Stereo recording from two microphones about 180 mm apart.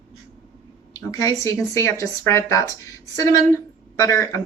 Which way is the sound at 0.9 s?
20° left (ahead or behind).